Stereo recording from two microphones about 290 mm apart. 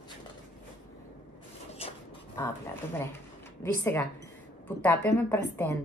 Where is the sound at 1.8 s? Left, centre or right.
Centre.